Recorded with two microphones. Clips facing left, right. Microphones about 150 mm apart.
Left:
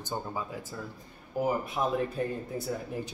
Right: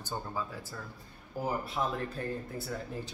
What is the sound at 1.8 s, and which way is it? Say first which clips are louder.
Speech: left 2 dB; 20° left (ahead or behind).